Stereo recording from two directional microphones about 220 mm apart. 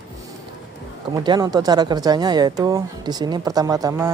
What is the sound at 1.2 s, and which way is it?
Speech, 20° right (ahead or behind).